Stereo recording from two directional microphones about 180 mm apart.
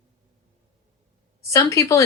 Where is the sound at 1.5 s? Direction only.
15° left (ahead or behind).